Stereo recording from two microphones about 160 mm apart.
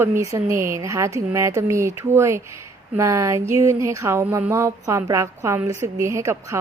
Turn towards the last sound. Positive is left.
turn(degrees=-20)  # may be behind; listen again after turning